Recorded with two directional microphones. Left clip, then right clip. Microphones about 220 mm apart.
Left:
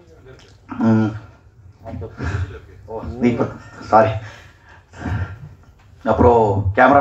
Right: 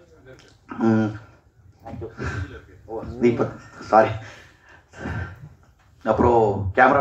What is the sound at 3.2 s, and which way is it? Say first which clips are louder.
Speech: even; 50° right (ahead or behind).